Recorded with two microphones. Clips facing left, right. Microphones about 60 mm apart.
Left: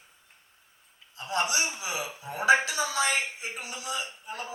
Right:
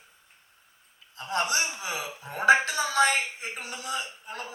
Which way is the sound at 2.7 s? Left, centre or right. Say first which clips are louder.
Right 4 dB; right.